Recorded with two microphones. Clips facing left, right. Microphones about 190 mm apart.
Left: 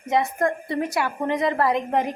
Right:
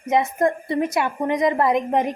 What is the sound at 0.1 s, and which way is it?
A woman's voice, 20° right (ahead or behind).